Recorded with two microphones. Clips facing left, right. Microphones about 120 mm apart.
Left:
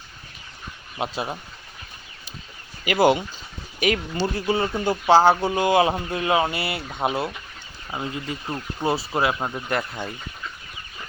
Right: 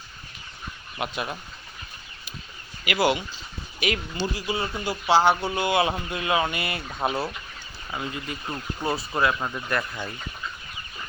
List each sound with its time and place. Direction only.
0.9 s speech: 30° left (ahead or behind)
2.8 s speech: 40° left (ahead or behind)
4.8 s speech: 45° left (ahead or behind)
5.4 s speech: 15° left (ahead or behind)
5.7 s speech: 30° left (ahead or behind)